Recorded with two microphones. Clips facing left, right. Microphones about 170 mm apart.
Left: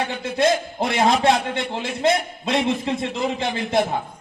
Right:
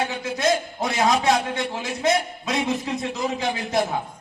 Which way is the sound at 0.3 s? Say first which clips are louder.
Left 3 dB; 25° left (ahead or behind).